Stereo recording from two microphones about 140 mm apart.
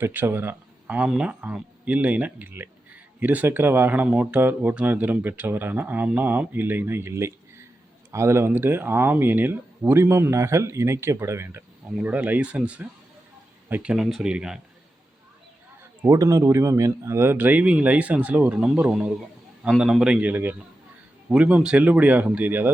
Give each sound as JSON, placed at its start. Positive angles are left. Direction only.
{"t": 0.0, "sound": "speech", "side_deg": -15}
{"t": 16.0, "sound": "speech", "side_deg": -20}